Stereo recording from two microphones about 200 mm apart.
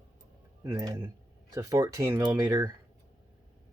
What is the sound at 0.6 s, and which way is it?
Speech, 15° right (ahead or behind).